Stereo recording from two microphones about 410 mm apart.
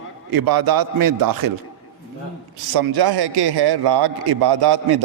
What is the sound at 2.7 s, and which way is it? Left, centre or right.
A man's voice, right.